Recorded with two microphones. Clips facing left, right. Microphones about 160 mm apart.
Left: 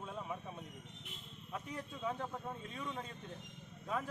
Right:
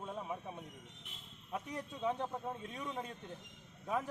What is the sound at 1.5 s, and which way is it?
A man's voice, 15° right (ahead or behind).